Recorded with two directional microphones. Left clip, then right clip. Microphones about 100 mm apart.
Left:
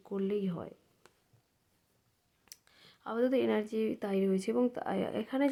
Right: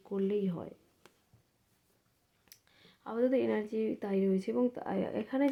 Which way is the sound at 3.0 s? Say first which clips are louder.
Even; 20° left (ahead or behind).